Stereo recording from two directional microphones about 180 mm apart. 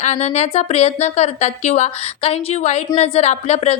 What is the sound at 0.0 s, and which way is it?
Speech, 40° left (ahead or behind).